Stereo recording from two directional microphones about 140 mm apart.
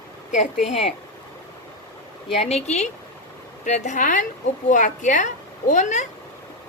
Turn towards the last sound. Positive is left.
turn(degrees=60)  # may be behind; listen again after turning